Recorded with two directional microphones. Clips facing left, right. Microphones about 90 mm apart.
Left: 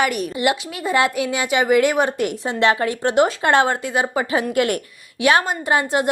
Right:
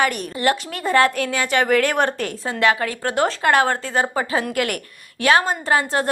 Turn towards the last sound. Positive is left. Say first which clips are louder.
# left 1 dB
turn(degrees=20)  # may be behind; listen again after turning